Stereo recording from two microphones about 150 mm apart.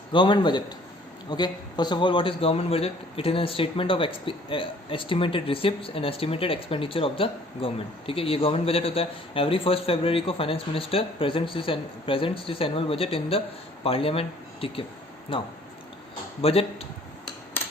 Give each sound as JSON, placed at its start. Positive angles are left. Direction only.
{"t": 0.1, "sound": "a man's voice", "side_deg": 30}